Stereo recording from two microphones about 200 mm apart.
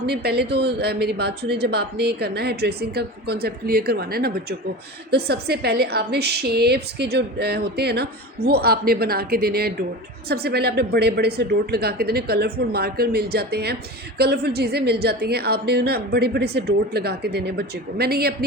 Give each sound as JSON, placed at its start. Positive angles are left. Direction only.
{"t": 0.0, "sound": "a woman's voice", "side_deg": -55}